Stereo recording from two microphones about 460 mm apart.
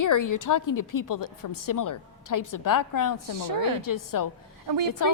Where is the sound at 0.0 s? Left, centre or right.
Left.